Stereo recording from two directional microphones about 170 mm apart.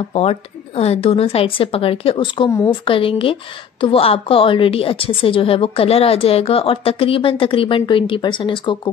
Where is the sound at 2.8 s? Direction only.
30° left (ahead or behind).